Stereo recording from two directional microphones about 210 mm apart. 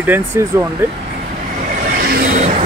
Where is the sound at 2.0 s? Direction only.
40° right (ahead or behind).